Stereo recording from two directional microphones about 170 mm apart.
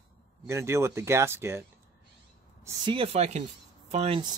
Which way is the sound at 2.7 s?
30° right (ahead or behind).